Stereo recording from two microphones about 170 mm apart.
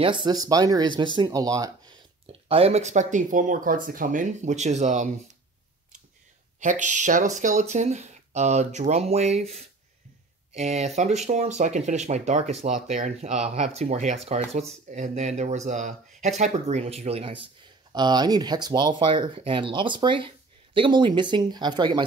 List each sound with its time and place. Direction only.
0.0 s speech: 30° right (ahead or behind)
2.2 s speech: 35° right (ahead or behind)
6.6 s speech: 45° right (ahead or behind)
17.9 s speech: 25° right (ahead or behind)